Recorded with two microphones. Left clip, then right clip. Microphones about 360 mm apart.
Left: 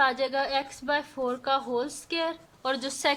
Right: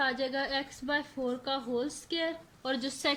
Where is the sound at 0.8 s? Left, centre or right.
Left.